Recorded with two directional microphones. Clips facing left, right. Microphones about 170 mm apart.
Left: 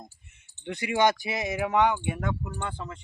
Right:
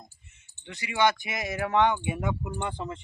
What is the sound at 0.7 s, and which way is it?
Speech, 50° left (ahead or behind).